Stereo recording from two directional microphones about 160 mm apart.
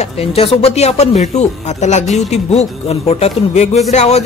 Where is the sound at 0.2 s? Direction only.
40° left (ahead or behind).